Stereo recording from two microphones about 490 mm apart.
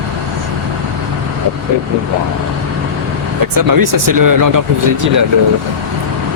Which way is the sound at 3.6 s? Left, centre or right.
Right.